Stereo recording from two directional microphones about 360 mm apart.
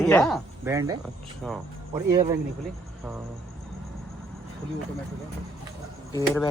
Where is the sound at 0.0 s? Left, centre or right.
Centre.